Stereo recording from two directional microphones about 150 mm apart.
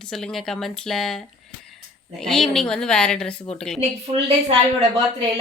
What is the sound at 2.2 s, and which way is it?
Speech, 5° left (ahead or behind).